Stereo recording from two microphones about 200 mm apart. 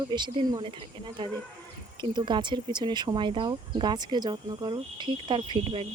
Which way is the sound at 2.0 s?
20° right (ahead or behind).